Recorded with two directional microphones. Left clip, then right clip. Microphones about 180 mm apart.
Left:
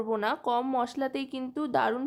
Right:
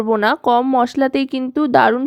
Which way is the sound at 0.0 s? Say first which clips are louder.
Right 13 dB; 45° right (ahead or behind).